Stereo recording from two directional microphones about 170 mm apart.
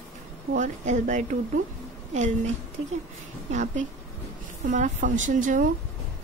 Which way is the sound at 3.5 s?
45° right (ahead or behind).